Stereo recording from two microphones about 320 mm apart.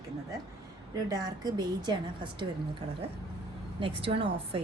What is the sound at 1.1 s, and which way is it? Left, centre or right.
A woman's voice, centre.